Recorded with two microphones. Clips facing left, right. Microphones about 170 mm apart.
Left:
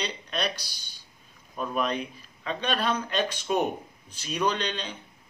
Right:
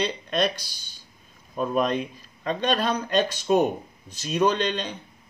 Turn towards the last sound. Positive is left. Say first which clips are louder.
# right 5 dB
turn(degrees=-45)  # may be behind; listen again after turning